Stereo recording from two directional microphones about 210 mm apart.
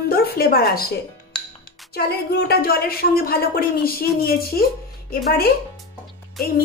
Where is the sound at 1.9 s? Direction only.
45° left (ahead or behind).